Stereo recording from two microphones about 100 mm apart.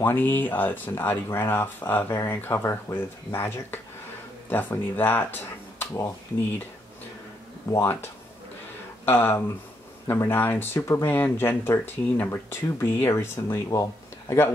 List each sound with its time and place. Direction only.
0.0 s speech: 20° left (ahead or behind)
7.7 s speech: 25° left (ahead or behind)